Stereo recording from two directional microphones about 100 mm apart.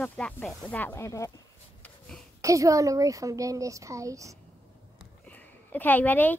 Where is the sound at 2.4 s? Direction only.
35° right (ahead or behind).